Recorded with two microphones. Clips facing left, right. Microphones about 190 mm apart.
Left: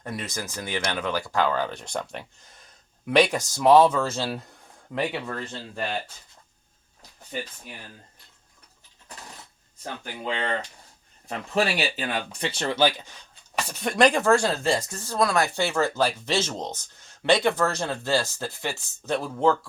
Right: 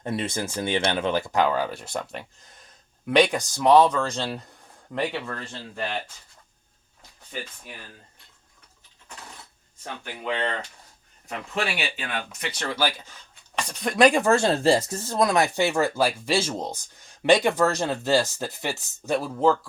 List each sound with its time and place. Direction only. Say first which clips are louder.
0.0 s speech: right 5 dB; 25° right (ahead or behind); by 5.2 s centre (ahead or behind)
11.3 s speech: left 4 dB; 35° left (ahead or behind)
13.6 s speech: right 1 dB; 5° left (ahead or behind)
14.1 s speech: right 1 dB; 15° right (ahead or behind)